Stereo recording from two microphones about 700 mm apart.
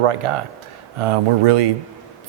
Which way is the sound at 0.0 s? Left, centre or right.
Right.